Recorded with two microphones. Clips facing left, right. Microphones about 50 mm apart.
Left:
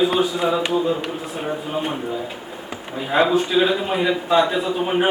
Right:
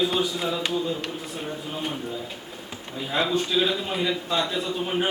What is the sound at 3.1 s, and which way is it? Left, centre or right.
A man's voice, left.